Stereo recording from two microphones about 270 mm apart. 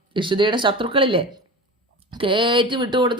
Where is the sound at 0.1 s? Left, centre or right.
Centre.